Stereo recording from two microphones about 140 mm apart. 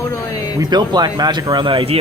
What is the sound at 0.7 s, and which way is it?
Speech, 30° right (ahead or behind).